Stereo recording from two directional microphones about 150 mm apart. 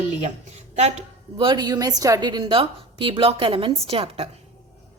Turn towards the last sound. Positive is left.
turn(degrees=-40)  # may be behind; listen again after turning